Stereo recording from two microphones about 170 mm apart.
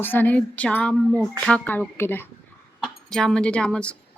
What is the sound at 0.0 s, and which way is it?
Speech, 10° left (ahead or behind).